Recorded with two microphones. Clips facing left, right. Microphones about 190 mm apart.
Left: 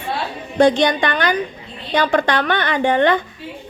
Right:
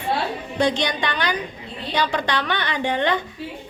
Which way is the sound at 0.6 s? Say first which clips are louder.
Left 8 dB; 50° left (ahead or behind).